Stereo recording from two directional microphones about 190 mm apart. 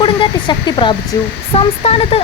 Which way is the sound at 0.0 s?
25° left (ahead or behind).